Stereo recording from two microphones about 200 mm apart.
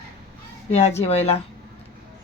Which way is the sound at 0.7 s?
35° left (ahead or behind).